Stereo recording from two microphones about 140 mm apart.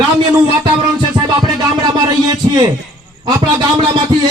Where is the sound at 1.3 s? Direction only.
30° right (ahead or behind).